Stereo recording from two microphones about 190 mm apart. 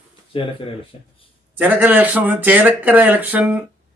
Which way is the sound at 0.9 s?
35° left (ahead or behind).